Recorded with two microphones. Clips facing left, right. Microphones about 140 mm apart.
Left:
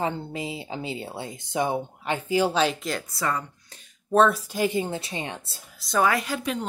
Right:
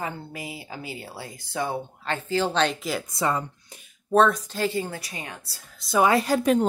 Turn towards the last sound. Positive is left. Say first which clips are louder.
# right 8 dB
turn(degrees=-45)  # may be behind; listen again after turning